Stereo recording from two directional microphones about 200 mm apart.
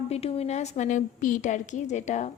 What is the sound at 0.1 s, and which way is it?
A woman's voice, 30° left (ahead or behind).